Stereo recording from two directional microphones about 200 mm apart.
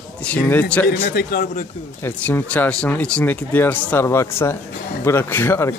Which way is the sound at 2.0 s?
10° left (ahead or behind).